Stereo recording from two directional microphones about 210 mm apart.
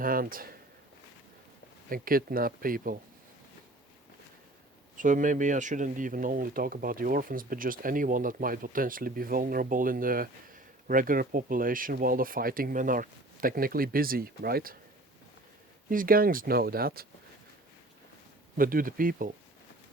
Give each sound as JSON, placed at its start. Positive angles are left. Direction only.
{"t": 0.0, "sound": "speech", "side_deg": -40}
{"t": 1.9, "sound": "speech", "side_deg": -45}
{"t": 4.9, "sound": "speech", "side_deg": -40}
{"t": 15.9, "sound": "speech", "side_deg": -40}
{"t": 18.5, "sound": "speech", "side_deg": -40}